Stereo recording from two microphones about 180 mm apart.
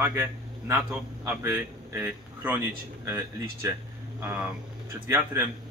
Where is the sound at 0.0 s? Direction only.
15° right (ahead or behind).